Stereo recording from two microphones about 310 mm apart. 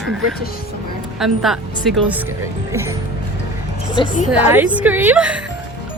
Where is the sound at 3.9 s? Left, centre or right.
Centre.